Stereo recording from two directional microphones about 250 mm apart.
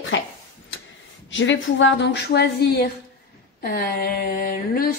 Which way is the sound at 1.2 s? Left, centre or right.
Left.